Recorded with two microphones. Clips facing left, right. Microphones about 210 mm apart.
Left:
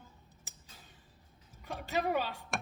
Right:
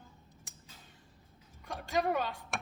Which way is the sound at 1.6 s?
5° left (ahead or behind).